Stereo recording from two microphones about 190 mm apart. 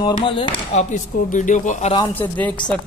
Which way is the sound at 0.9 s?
45° left (ahead or behind).